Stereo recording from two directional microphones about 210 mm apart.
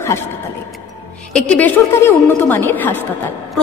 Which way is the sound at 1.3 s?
5° left (ahead or behind).